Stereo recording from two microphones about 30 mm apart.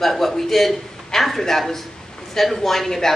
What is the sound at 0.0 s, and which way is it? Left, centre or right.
A man's voice, centre.